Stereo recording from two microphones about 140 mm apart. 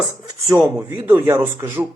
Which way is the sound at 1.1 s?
15° right (ahead or behind).